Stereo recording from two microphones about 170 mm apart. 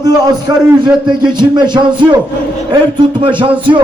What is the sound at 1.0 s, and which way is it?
Speech, 25° right (ahead or behind).